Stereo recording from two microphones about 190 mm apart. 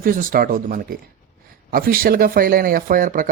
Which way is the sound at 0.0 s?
45° right (ahead or behind).